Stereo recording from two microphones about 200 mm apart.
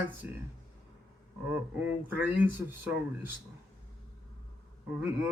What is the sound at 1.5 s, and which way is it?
Speech, 10° right (ahead or behind).